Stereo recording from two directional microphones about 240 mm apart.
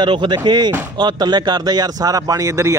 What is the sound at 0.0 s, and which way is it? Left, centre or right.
A man's voice, centre.